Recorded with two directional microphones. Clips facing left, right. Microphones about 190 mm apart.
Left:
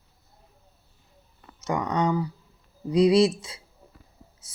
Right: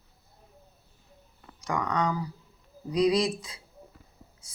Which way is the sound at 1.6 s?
30° left (ahead or behind).